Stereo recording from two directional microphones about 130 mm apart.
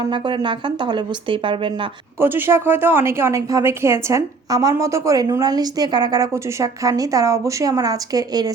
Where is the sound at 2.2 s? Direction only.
15° right (ahead or behind).